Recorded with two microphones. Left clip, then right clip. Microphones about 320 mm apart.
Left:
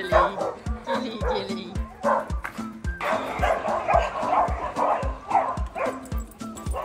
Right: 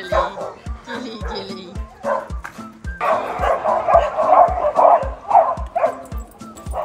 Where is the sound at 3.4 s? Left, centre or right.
Centre.